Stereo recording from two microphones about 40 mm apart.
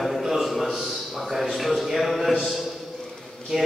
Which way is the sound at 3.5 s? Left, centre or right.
Centre.